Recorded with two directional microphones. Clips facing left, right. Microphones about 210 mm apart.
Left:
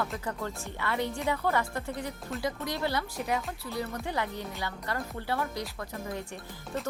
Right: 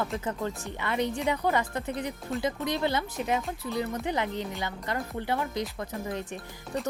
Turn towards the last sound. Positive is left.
turn(degrees=-20)  # may be behind; listen again after turning